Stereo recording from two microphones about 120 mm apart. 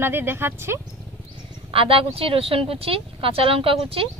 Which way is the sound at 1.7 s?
50° right (ahead or behind).